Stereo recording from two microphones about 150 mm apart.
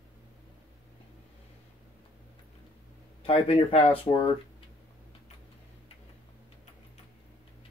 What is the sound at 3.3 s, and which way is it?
Speech, 40° left (ahead or behind).